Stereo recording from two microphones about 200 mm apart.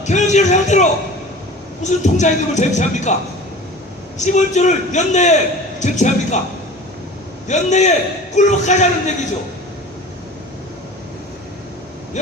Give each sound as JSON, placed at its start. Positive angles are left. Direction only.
{"t": 0.0, "sound": "music", "side_deg": 35}
{"t": 1.8, "sound": "speech", "side_deg": 35}
{"t": 4.2, "sound": "speech", "side_deg": 35}
{"t": 7.4, "sound": "speech", "side_deg": 35}
{"t": 12.2, "sound": "a sound", "side_deg": 35}